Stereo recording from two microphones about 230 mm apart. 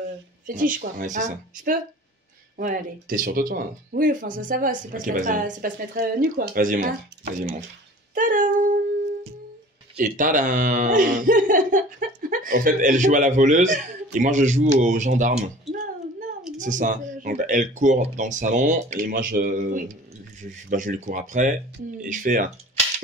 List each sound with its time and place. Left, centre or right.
0.5 s speech: right
2.5 s speech: right
8.1 s speech: right
9.9 s speech: right
15.7 s a sound: right
16.5 s speech: right